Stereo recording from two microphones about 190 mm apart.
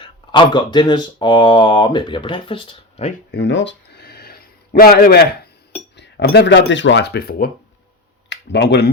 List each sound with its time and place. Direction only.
0.0 s speech: 25° left (ahead or behind)
3.3 s a sound: 70° left (ahead or behind)
6.0 s speech: 65° left (ahead or behind)
8.3 s speech: 65° left (ahead or behind)